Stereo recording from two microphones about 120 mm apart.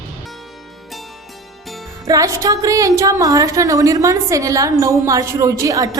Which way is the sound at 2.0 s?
30° right (ahead or behind).